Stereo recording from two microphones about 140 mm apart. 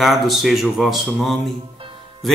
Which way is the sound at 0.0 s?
Centre (ahead or behind).